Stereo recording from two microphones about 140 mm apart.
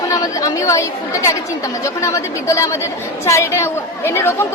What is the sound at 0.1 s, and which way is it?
A woman's voice, 25° left (ahead or behind).